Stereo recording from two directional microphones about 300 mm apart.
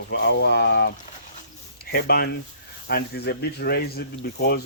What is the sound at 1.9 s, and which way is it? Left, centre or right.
Speech, left.